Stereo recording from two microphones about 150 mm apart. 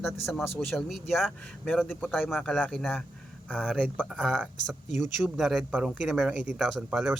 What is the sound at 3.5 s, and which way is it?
Speech, 5° right (ahead or behind).